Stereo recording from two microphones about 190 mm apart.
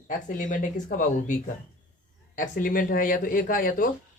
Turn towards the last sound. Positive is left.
turn(degrees=45)  # may be behind; listen again after turning